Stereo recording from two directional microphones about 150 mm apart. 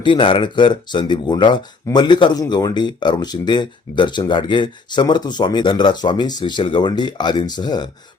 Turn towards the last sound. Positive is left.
turn(degrees=30)  # may be behind; listen again after turning